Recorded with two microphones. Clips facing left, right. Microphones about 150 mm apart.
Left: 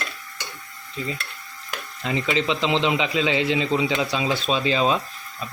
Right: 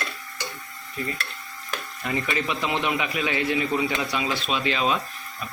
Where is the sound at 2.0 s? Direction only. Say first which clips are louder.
Left 4 dB; 20° left (ahead or behind).